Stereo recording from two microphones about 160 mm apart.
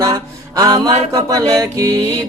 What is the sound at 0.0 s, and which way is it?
Music, 20° right (ahead or behind).